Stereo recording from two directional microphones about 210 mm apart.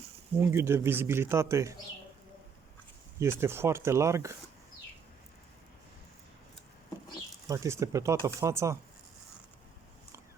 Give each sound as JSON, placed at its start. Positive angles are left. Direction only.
{"t": 0.3, "sound": "speech", "side_deg": -10}
{"t": 3.2, "sound": "speech", "side_deg": -10}
{"t": 7.4, "sound": "speech", "side_deg": -15}